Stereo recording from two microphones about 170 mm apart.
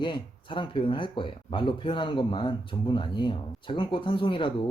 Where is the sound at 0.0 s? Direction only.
30° left (ahead or behind).